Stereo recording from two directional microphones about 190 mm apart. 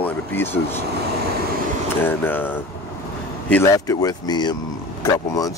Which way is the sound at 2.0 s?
10° left (ahead or behind).